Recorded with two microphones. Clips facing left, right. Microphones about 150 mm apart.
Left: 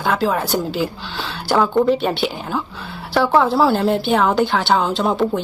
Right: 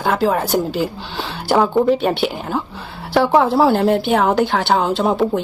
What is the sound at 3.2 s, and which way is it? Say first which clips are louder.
Speech: right 2 dB; 15° right (ahead or behind).